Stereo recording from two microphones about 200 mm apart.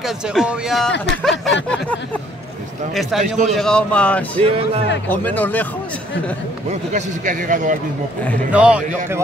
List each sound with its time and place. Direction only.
0.0 s speech: centre (ahead or behind)
0.9 s speech: 60° left (ahead or behind)
1.4 s speech: 5° left (ahead or behind)
4.5 s speech: 30° right (ahead or behind)
5.0 s speech: 10° left (ahead or behind)
6.7 s a man's voice: 40° right (ahead or behind)
8.5 s speech: 5° right (ahead or behind)